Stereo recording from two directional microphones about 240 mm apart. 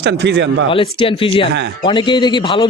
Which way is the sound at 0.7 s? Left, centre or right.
Left.